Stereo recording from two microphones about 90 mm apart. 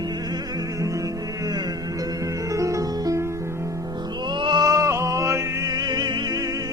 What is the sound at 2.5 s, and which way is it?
Music, 35° right (ahead or behind).